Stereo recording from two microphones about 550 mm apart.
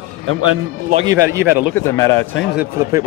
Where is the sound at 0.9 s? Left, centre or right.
Centre.